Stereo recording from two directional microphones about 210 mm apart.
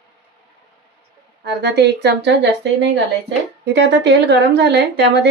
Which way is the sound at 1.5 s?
50° right (ahead or behind).